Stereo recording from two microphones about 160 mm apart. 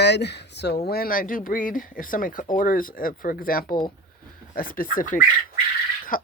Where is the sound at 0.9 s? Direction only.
70° left (ahead or behind).